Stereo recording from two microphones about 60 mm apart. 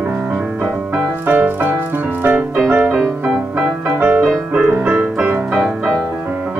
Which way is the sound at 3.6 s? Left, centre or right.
Right.